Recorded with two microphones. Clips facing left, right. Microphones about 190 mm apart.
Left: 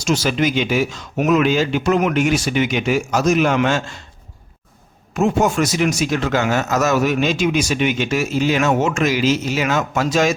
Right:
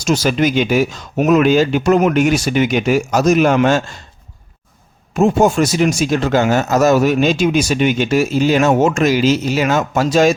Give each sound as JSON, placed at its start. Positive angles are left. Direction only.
{"t": 0.0, "sound": "speech", "side_deg": -40}
{"t": 5.1, "sound": "speech", "side_deg": -30}